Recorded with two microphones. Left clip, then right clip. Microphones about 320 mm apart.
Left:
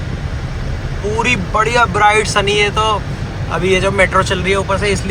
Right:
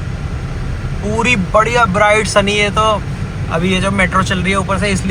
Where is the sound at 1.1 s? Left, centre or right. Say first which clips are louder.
Right 3 dB; centre.